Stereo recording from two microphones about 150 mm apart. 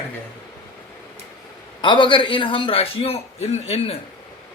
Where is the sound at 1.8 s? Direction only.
30° left (ahead or behind).